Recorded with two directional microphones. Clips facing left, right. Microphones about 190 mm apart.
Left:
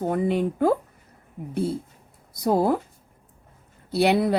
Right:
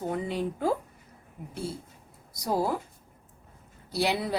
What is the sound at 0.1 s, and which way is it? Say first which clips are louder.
Speech: left 8 dB; 60° left (ahead or behind).